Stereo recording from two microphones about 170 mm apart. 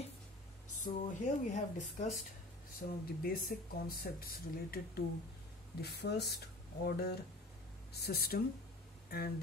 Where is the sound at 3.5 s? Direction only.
60° left (ahead or behind).